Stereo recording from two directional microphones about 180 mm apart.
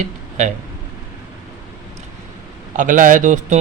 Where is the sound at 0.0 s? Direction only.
45° right (ahead or behind).